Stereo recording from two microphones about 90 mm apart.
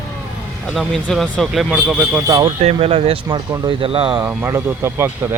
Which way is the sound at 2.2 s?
40° right (ahead or behind).